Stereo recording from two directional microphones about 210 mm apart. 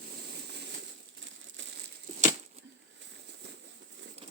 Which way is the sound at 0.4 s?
50° right (ahead or behind).